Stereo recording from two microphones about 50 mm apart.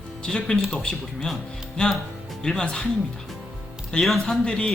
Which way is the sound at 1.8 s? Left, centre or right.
Left.